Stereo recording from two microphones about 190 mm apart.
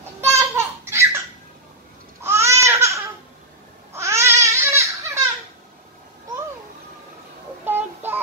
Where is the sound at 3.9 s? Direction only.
15° right (ahead or behind).